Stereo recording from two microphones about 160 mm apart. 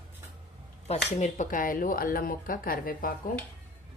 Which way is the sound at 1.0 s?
45° left (ahead or behind).